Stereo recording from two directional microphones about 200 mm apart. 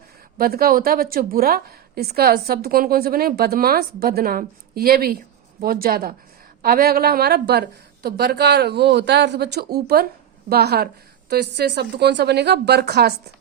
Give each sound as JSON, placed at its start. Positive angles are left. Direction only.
{"t": 0.3, "sound": "a woman's voice", "side_deg": -50}